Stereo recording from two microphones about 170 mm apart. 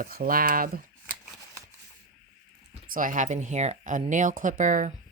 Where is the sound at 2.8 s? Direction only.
55° right (ahead or behind).